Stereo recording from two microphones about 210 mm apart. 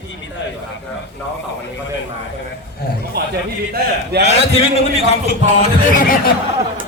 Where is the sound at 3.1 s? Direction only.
45° right (ahead or behind).